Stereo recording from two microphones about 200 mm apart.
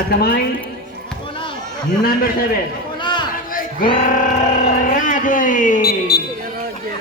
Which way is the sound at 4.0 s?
40° left (ahead or behind).